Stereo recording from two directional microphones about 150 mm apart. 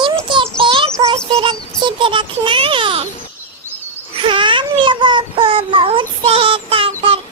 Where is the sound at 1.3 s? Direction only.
35° right (ahead or behind).